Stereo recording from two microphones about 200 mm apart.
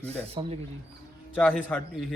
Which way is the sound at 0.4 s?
25° right (ahead or behind).